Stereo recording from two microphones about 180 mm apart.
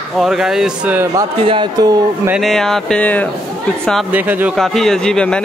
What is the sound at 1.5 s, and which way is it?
Speech, 25° right (ahead or behind).